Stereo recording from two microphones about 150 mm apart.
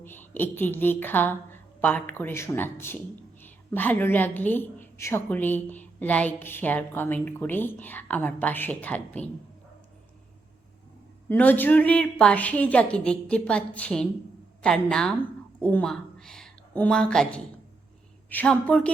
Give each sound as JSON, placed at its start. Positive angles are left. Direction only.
{"t": 0.0, "sound": "a woman's voice", "side_deg": 15}
{"t": 11.3, "sound": "a woman's voice", "side_deg": 10}